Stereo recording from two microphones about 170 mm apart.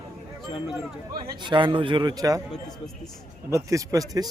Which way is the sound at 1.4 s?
30° right (ahead or behind).